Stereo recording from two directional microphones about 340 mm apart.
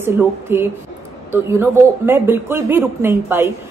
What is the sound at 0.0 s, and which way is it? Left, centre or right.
A woman's voice, centre.